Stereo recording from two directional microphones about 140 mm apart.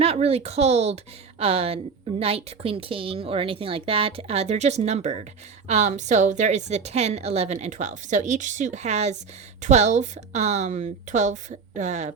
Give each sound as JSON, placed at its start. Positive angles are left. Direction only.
{"t": 0.0, "sound": "a woman's voice", "side_deg": -45}